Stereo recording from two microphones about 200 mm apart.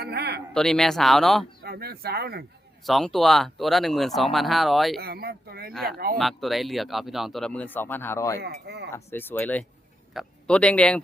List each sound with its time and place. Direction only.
0.0 s a sound: 55° right (ahead or behind)
0.5 s speech: 5° left (ahead or behind)
1.6 s speech: 50° right (ahead or behind)
2.8 s speech: centre (ahead or behind)
4.9 s speech: 50° right (ahead or behind)
6.1 s speech: centre (ahead or behind)
8.4 s speech: 55° right (ahead or behind)
8.9 s speech: 10° left (ahead or behind)